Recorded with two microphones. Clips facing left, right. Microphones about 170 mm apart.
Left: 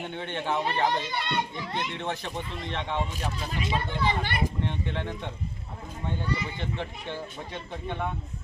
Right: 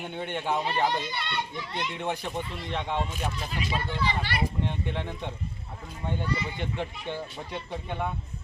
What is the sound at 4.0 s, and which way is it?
Speech, 50° left (ahead or behind).